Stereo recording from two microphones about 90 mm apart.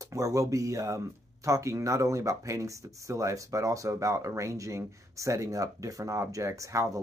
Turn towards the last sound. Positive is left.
turn(degrees=-35)  # may be behind; listen again after turning